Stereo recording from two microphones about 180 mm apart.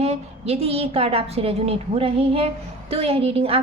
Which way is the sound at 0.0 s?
35° right (ahead or behind).